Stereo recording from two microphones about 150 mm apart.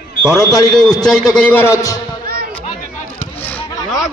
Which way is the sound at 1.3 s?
10° left (ahead or behind).